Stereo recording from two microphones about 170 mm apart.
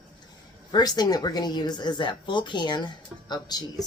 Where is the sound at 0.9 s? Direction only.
25° left (ahead or behind).